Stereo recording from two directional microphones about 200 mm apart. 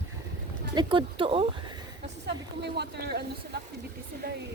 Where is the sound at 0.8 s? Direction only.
25° right (ahead or behind).